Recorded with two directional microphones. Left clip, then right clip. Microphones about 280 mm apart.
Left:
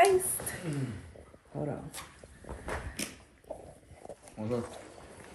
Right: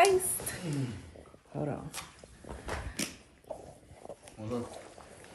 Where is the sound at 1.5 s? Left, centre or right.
Centre.